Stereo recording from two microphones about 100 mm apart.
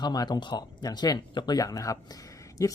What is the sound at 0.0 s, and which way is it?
Speech, 45° left (ahead or behind).